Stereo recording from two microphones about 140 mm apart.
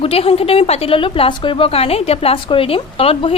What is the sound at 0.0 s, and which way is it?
A woman's voice, 45° left (ahead or behind).